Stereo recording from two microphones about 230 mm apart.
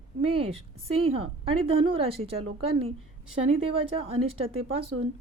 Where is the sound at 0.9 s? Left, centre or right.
Right.